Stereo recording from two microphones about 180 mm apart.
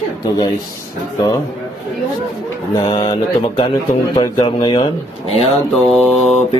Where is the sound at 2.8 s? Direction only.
25° left (ahead or behind).